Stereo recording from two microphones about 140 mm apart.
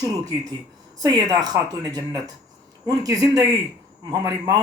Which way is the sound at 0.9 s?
30° right (ahead or behind).